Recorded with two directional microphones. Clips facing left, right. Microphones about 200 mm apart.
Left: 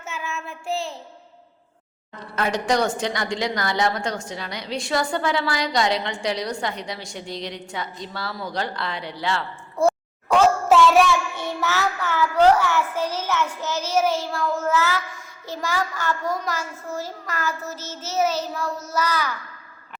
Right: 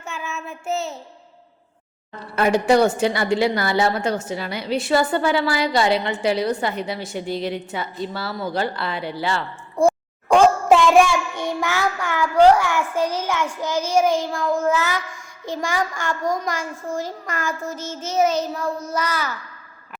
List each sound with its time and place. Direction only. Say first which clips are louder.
0.2 s a woman's voice: right 1 dB; centre (ahead or behind)
2.3 s a woman's voice: right 6 dB; 10° right (ahead or behind)
9.7 s a sound: right 2 dB; 15° right (ahead or behind)
15.4 s a child's voice: right 3 dB; 15° right (ahead or behind)
17.2 s child singing: right 2 dB; 50° right (ahead or behind)
18.0 s a woman's voice: right 3 dB; 5° left (ahead or behind)
18.9 s child singing: even; 50° right (ahead or behind)